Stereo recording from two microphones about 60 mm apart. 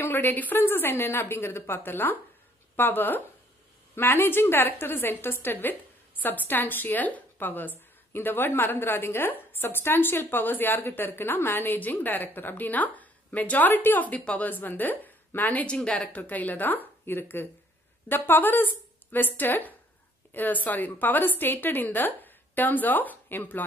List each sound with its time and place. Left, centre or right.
0.0 s a woman's voice: left
15.6 s a woman's voice: centre; by 23.6 s left